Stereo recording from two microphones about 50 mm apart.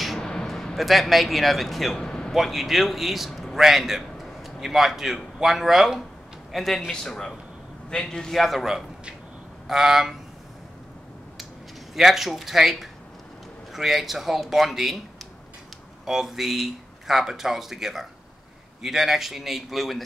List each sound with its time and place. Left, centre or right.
0.2 s a sound: centre
0.7 s a man's voice: centre
2.0 s a sound: centre
2.3 s a man's voice: centre
9.7 s speech: centre
11.9 s a man's voice: centre
16.1 s a man's voice: centre